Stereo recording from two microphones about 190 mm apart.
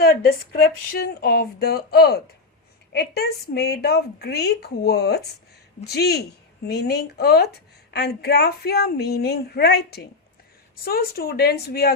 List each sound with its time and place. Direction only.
0.0 s a woman's voice: 55° left (ahead or behind)